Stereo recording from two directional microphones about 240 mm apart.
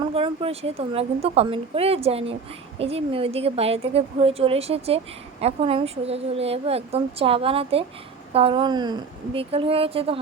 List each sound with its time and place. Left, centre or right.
0.0 s a woman's voice: right